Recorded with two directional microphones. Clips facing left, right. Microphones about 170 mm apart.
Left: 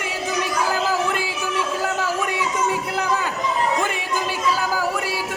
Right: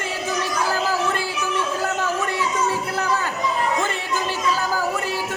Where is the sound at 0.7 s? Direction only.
15° left (ahead or behind).